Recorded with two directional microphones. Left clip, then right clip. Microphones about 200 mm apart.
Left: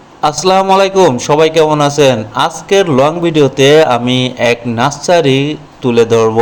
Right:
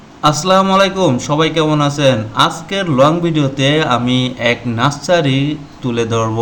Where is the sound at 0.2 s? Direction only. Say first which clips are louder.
Left 2 dB; 25° left (ahead or behind).